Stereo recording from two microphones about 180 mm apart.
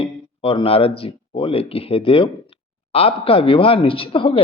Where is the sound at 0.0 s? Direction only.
30° left (ahead or behind).